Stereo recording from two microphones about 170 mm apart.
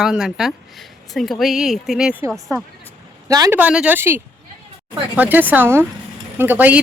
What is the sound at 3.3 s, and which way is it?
Speech, 20° right (ahead or behind).